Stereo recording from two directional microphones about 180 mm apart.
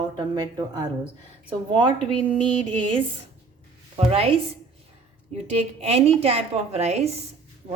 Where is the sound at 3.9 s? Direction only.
35° right (ahead or behind).